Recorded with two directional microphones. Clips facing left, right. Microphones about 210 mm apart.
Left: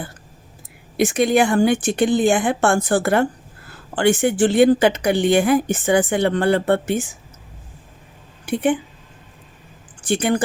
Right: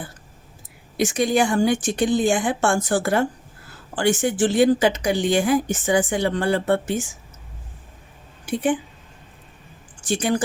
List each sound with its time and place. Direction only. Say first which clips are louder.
0.9 s a woman's voice: left 3 dB; 60° left (ahead or behind)
10.0 s a woman's voice: left 3 dB; 60° left (ahead or behind)